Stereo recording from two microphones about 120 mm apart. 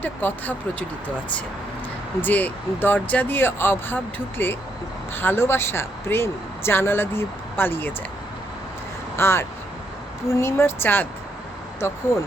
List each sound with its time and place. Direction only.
0.0 s speech: 15° left (ahead or behind)
9.1 s speech: 20° left (ahead or behind)